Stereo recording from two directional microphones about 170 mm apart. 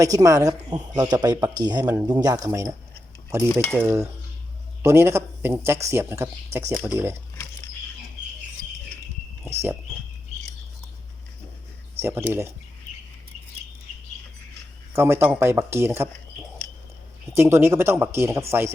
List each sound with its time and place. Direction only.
0.0 s speech: 20° right (ahead or behind)
3.2 s stir: 15° right (ahead or behind)
3.5 s cutlery: centre (ahead or behind)
3.8 s speech: 15° right (ahead or behind)
11.9 s speech: 15° right (ahead or behind)
14.9 s speech: 15° right (ahead or behind)
17.3 s speech: 15° right (ahead or behind)